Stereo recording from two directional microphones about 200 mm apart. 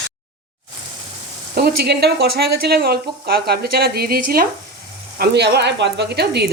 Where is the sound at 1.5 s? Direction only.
55° right (ahead or behind).